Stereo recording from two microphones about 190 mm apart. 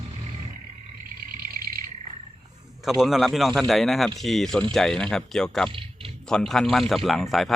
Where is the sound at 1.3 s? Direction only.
50° right (ahead or behind).